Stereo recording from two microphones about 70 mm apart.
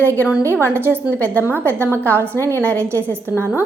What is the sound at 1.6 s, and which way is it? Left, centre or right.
Speech, right.